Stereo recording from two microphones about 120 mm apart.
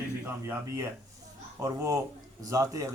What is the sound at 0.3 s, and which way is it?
A man's voice, 20° right (ahead or behind).